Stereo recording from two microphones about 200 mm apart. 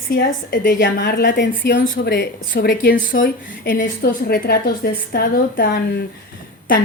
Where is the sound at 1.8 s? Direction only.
50° left (ahead or behind).